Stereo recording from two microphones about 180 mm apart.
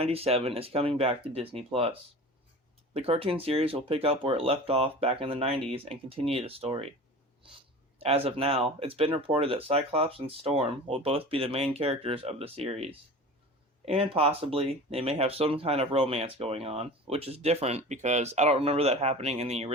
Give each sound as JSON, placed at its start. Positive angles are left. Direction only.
{"t": 0.0, "sound": "speech", "side_deg": -35}
{"t": 7.9, "sound": "speech", "side_deg": -35}